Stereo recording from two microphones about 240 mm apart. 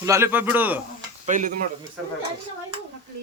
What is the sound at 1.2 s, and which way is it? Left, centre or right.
Speech, right.